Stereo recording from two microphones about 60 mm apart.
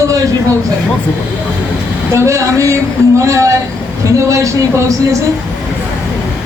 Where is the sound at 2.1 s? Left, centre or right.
Right.